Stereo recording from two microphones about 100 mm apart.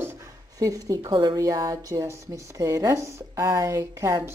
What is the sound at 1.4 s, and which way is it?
A woman's voice, 35° right (ahead or behind).